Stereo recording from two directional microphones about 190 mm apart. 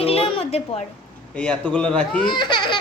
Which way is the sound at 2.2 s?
25° left (ahead or behind).